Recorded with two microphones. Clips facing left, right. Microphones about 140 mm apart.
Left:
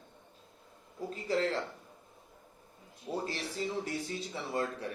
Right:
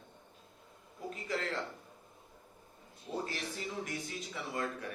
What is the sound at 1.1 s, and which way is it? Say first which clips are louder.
Speech: left 7 dB; 30° left (ahead or behind).